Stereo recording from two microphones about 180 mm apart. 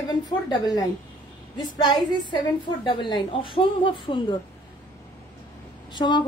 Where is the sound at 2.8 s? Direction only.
25° left (ahead or behind).